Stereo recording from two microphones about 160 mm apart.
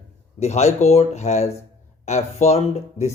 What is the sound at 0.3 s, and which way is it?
Speech, 45° left (ahead or behind).